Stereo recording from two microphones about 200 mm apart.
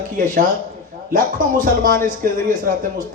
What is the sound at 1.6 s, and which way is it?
Speech, 45° right (ahead or behind).